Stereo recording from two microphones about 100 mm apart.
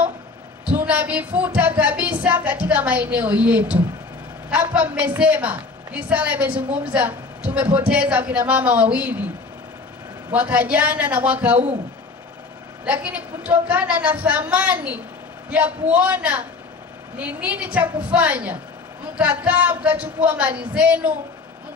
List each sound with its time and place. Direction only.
0.7 s a woman's voice: 15° right (ahead or behind)
10.3 s a woman's voice: 15° right (ahead or behind)
12.8 s a woman's voice: 15° right (ahead or behind)